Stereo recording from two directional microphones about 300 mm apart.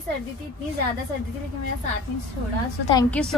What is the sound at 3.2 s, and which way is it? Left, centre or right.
Speech, centre.